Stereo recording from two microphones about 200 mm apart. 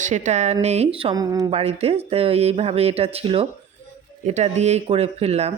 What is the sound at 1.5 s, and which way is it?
Speech, 30° right (ahead or behind).